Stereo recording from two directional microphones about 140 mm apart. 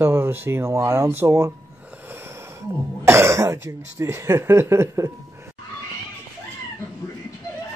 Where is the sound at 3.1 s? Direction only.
20° right (ahead or behind).